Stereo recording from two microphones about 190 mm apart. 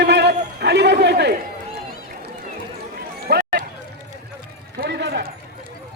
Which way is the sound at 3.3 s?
55° right (ahead or behind).